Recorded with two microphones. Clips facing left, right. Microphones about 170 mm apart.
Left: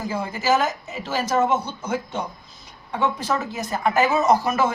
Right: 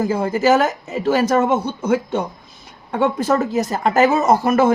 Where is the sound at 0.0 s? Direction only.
50° right (ahead or behind).